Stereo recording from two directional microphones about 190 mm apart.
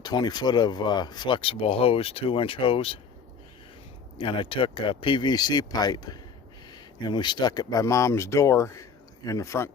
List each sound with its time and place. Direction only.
0.0 s speech: 20° left (ahead or behind)
4.2 s speech: 25° left (ahead or behind)